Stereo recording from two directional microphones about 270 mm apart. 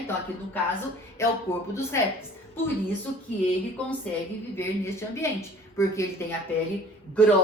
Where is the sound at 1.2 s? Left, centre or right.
Centre.